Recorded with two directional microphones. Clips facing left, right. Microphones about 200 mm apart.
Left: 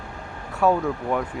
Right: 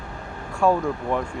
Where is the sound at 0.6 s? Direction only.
5° left (ahead or behind).